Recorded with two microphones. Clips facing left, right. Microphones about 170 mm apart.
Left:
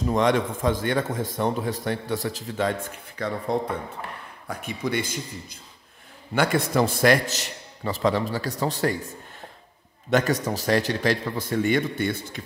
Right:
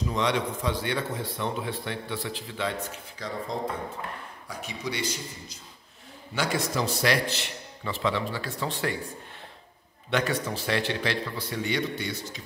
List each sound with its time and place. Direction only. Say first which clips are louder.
0.0 s a man's voice: left 5 dB; 50° left (ahead or behind)
10.0 s a man's voice: left 5 dB; 45° left (ahead or behind)